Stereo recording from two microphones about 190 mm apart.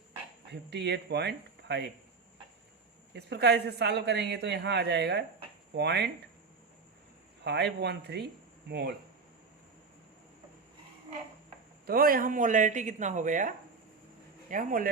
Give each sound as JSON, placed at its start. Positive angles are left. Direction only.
{"t": 0.5, "sound": "a woman's voice", "side_deg": -65}
{"t": 3.2, "sound": "a woman's voice", "side_deg": -60}
{"t": 7.4, "sound": "a woman's voice", "side_deg": -60}
{"t": 11.9, "sound": "speech", "side_deg": -50}
{"t": 14.5, "sound": "speech", "side_deg": -45}